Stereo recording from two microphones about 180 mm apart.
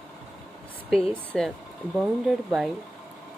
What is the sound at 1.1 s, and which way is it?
Speech, 5° left (ahead or behind).